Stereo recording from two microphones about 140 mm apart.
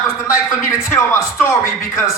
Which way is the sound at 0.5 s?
20° left (ahead or behind).